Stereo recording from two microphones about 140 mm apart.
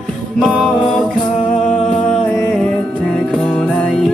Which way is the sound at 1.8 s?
50° left (ahead or behind).